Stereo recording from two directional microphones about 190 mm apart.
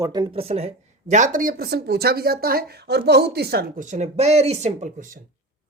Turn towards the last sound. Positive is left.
turn(degrees=-45)  # may be behind; listen again after turning